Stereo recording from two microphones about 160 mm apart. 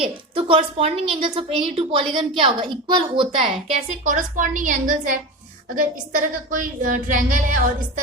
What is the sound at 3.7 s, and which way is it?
A woman's voice, 50° right (ahead or behind).